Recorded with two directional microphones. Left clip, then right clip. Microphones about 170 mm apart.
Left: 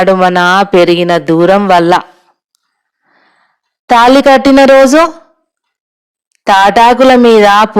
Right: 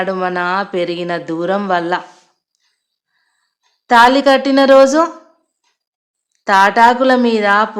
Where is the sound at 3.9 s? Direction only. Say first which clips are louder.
Left 5 dB; 45° left (ahead or behind).